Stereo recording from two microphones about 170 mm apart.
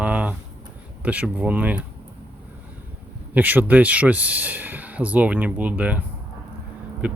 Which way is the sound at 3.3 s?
10° right (ahead or behind).